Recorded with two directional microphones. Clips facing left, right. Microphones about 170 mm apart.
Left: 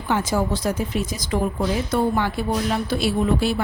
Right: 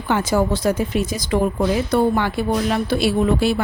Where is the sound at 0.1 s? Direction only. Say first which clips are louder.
Right 3 dB; 70° right (ahead or behind).